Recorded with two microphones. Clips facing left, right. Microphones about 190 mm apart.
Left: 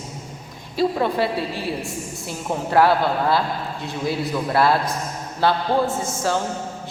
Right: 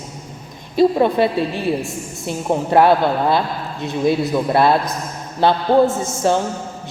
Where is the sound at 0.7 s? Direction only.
20° right (ahead or behind).